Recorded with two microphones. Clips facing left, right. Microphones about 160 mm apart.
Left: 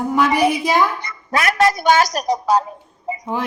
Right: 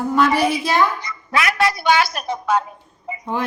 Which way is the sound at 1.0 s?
50° left (ahead or behind).